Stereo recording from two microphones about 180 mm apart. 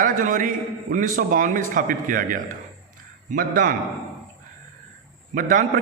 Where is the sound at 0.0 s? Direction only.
45° right (ahead or behind).